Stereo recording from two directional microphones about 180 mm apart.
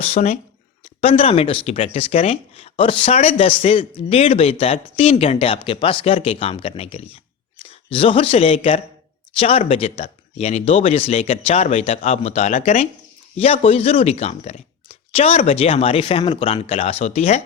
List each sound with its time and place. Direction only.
0.0 s speech: 35° left (ahead or behind)